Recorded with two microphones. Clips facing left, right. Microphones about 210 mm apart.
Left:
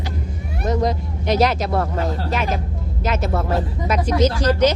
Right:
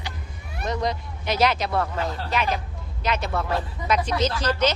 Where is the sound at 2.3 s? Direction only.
45° left (ahead or behind).